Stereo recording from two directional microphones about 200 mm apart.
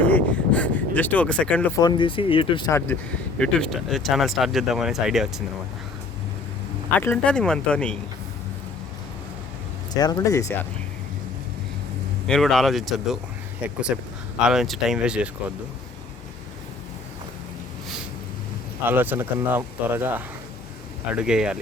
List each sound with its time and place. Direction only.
0.0 s a sound: 5° left (ahead or behind)
1.8 s speech: 20° left (ahead or behind); by 5.3 s centre (ahead or behind)
7.0 s speech: 5° left (ahead or behind)
9.9 s speech: 20° left (ahead or behind)
12.3 s speech: centre (ahead or behind)
18.9 s speech: 10° right (ahead or behind)